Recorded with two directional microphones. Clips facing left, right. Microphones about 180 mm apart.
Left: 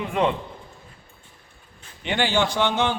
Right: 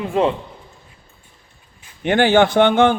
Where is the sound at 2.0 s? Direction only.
50° right (ahead or behind).